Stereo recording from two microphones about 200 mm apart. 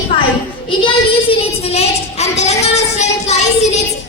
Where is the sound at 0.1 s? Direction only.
25° left (ahead or behind).